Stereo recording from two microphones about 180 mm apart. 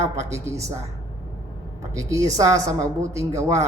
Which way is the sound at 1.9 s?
20° right (ahead or behind).